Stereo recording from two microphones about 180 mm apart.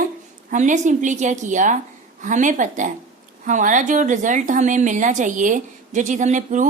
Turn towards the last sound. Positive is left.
turn(degrees=-45)  # may be behind; listen again after turning